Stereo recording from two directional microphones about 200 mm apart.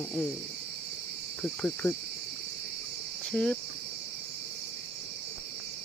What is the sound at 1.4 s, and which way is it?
Cricket, 5° left (ahead or behind).